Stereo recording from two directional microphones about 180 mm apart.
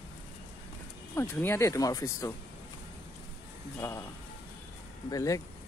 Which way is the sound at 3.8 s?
15° left (ahead or behind).